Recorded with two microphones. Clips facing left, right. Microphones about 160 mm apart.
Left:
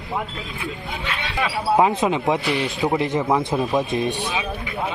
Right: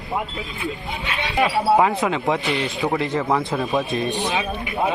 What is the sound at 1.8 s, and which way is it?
A man's voice, 20° left (ahead or behind).